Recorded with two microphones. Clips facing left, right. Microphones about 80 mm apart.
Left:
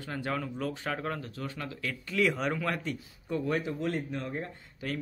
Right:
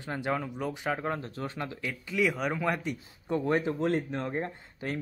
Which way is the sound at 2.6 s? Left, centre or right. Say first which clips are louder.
Right 2 dB; centre.